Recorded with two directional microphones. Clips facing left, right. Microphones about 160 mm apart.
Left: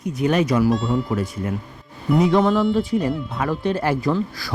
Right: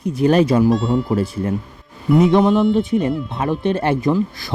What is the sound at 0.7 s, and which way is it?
Speech, centre (ahead or behind).